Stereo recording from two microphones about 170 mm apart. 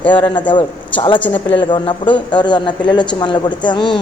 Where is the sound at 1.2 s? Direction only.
10° left (ahead or behind).